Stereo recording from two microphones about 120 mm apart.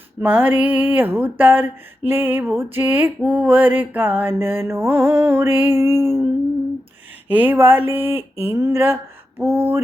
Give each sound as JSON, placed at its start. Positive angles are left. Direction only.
{"t": 0.2, "sound": "mantra", "side_deg": -15}
{"t": 7.3, "sound": "mantra", "side_deg": -15}
{"t": 8.5, "sound": "speech", "side_deg": -30}